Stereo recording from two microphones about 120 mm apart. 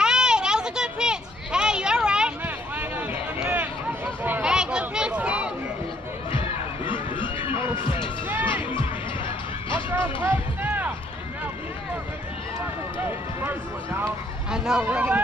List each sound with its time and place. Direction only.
0.0 s a sound: 5° right (ahead or behind)
6.9 s run: 45° left (ahead or behind)
7.5 s music: 20° right (ahead or behind)
7.8 s music: 45° left (ahead or behind)
8.3 s music: 15° right (ahead or behind)
9.8 s a sound: 15° right (ahead or behind)
13.0 s run: 20° right (ahead or behind)
14.5 s speech: 5° right (ahead or behind)